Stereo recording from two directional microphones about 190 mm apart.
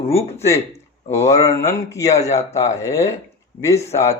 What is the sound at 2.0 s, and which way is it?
Speech, 35° left (ahead or behind).